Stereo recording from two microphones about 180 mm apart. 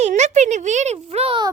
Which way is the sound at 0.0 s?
40° right (ahead or behind).